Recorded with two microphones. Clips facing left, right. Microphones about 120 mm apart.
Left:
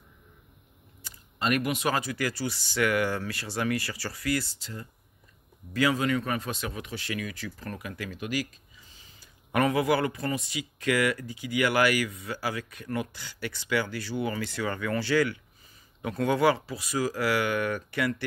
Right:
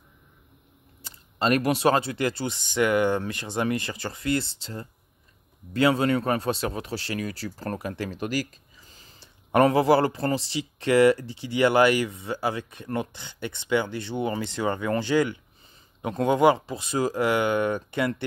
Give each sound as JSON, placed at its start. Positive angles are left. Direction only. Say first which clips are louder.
{"t": 1.0, "sound": "speech", "louder": "right 4 dB", "side_deg": -30}